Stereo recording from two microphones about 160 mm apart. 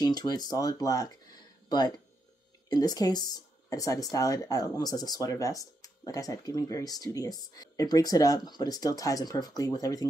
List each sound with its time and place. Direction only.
0.0 s speech: 25° left (ahead or behind)